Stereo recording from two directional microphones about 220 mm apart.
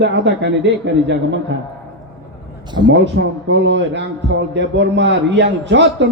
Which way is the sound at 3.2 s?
50° right (ahead or behind).